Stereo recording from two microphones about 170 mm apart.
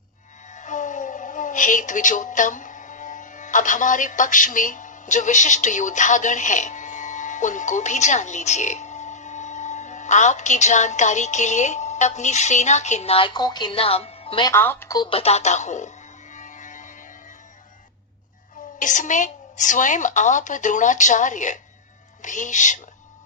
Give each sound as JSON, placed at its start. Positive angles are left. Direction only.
{"t": 0.5, "sound": "speech", "side_deg": 45}
{"t": 14.5, "sound": "a woman's voice", "side_deg": 15}
{"t": 16.3, "sound": "music", "side_deg": 45}
{"t": 18.8, "sound": "a woman's voice", "side_deg": 50}